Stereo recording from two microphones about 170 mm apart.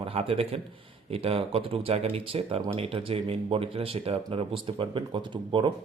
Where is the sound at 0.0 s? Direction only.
35° right (ahead or behind).